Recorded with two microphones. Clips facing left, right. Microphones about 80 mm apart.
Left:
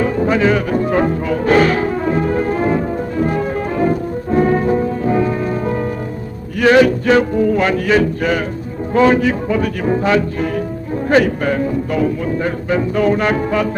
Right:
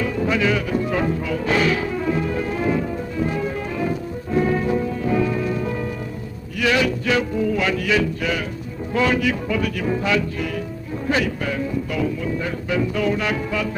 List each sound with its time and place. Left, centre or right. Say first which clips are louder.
0.0 s music: left 6 dB; left
6.6 s speech: left 9 dB; left